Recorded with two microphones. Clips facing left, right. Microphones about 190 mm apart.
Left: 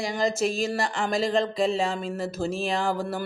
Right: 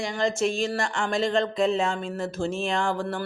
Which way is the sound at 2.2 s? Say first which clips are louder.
Even; 40° left (ahead or behind).